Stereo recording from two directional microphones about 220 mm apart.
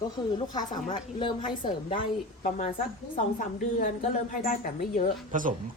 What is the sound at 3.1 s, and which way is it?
A woman's voice, 35° left (ahead or behind).